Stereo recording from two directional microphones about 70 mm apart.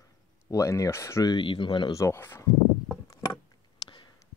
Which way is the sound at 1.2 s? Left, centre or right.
Left.